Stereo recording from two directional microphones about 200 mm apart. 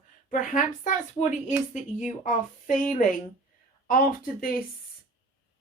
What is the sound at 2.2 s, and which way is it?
Speech, 40° left (ahead or behind).